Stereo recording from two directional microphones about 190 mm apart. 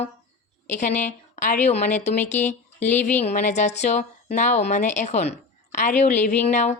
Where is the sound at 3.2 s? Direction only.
40° left (ahead or behind).